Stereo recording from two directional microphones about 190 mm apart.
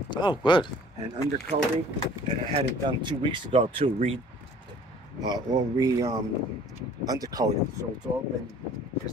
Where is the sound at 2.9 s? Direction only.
25° right (ahead or behind).